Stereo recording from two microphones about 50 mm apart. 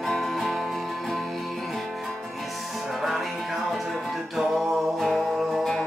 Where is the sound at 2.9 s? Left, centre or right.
Centre.